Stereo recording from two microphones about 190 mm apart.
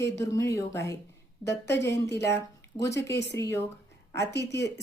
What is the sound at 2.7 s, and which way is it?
Speech, 15° left (ahead or behind).